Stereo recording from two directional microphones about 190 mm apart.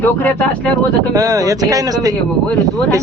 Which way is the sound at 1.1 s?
20° right (ahead or behind).